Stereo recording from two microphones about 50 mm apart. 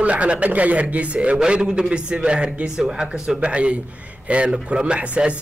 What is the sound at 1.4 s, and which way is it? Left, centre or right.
Speech, centre.